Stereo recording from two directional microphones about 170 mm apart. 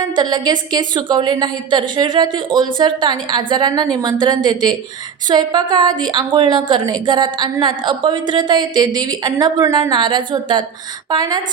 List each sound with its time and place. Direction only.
0.0 s a woman's voice: 25° right (ahead or behind)